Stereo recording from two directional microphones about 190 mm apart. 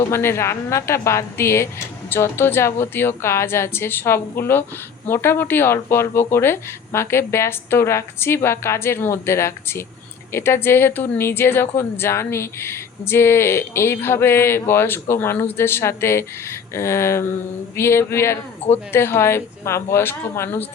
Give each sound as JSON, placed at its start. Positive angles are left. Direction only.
{"t": 0.0, "sound": "speech", "side_deg": 15}